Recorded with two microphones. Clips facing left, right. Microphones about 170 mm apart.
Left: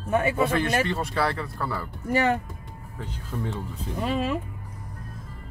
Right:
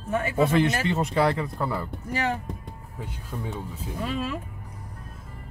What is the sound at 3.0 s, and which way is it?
Speech, 10° right (ahead or behind).